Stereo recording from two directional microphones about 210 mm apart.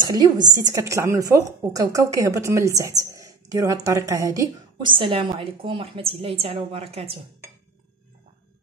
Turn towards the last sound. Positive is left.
turn(degrees=-30)  # may be behind; listen again after turning